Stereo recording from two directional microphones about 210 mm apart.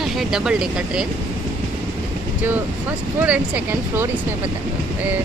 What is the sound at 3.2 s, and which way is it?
Speech, 5° right (ahead or behind).